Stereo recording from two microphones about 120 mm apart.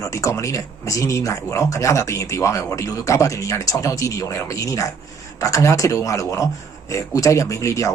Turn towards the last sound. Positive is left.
turn(degrees=25)  # may be behind; listen again after turning